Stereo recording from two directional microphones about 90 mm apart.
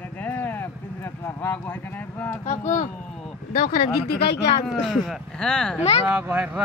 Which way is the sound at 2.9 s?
5° left (ahead or behind).